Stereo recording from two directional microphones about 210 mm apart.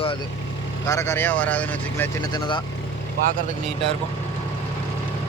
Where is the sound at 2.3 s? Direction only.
20° left (ahead or behind).